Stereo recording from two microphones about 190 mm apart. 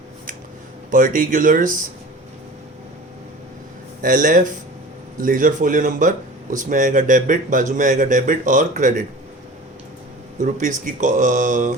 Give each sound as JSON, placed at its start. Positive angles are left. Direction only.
{"t": 0.9, "sound": "speech", "side_deg": -45}
{"t": 4.0, "sound": "speech", "side_deg": -45}
{"t": 10.4, "sound": "speech", "side_deg": -40}